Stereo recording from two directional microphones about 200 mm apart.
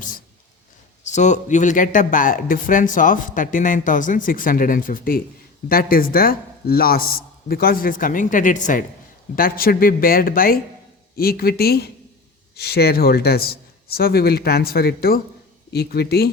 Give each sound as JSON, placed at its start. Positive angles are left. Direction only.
{"t": 1.0, "sound": "speech", "side_deg": 35}